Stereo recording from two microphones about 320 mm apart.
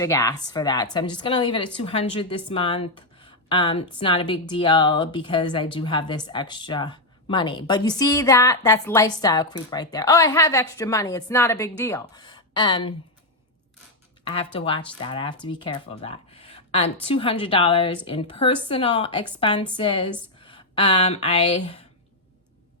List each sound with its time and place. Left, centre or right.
0.0 s a woman's voice: centre
14.3 s a woman's voice: centre